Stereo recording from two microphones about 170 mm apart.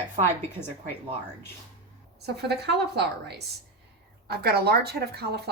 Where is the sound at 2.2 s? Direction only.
75° right (ahead or behind).